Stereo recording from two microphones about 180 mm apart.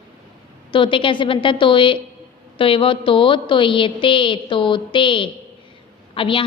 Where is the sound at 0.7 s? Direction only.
30° left (ahead or behind).